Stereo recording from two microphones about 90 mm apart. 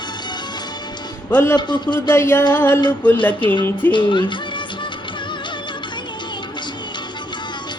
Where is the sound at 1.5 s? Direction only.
55° left (ahead or behind).